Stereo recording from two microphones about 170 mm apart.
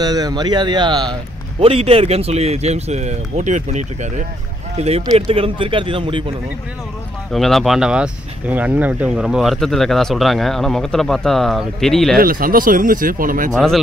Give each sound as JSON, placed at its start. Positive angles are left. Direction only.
{"t": 0.0, "sound": "speech", "side_deg": -25}
{"t": 7.2, "sound": "speech", "side_deg": 0}
{"t": 12.2, "sound": "speech", "side_deg": -55}